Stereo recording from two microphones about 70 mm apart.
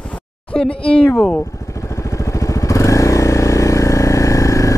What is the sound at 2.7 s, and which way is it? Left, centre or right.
Vehicle, left.